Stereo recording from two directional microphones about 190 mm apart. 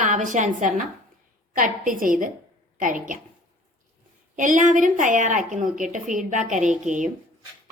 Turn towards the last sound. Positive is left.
turn(degrees=-40)  # may be behind; listen again after turning